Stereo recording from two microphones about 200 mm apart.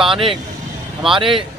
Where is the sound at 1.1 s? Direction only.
25° right (ahead or behind).